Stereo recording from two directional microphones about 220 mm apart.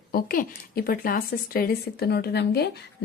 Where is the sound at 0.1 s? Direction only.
40° left (ahead or behind).